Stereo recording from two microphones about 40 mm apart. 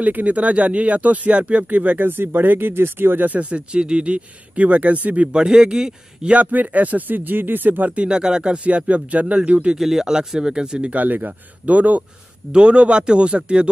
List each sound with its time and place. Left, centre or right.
0.0 s speech: right
2.0 s speech: right
2.7 s speech: right
3.3 s speech: right
5.3 s speech: right
6.3 s a man's voice: right
7.9 s speech: right
8.6 s speech: right
9.8 s speech: centre
10.9 s speech: right
12.5 s speech: right